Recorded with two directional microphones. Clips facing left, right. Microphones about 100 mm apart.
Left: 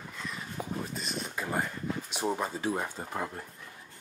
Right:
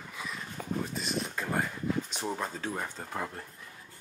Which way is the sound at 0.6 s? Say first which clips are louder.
Even; 10° left (ahead or behind).